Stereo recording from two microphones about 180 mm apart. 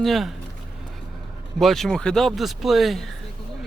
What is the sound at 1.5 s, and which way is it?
Speech, centre (ahead or behind).